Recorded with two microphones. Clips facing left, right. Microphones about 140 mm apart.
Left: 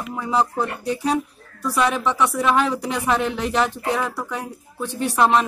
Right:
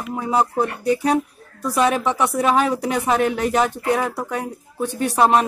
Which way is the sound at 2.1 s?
45° right (ahead or behind).